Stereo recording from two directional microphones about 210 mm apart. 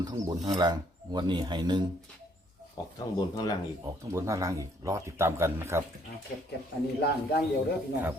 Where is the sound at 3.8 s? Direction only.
15° right (ahead or behind).